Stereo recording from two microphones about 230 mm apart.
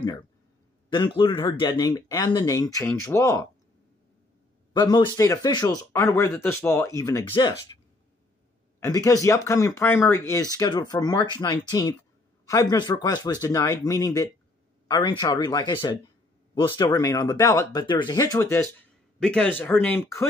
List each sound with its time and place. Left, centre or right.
0.9 s speech: centre
4.7 s speech: centre
8.7 s speech: centre